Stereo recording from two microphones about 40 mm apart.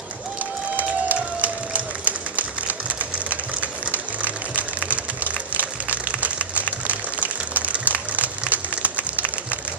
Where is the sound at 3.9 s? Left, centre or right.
Right.